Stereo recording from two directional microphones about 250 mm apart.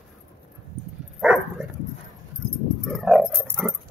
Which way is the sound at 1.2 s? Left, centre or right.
Centre.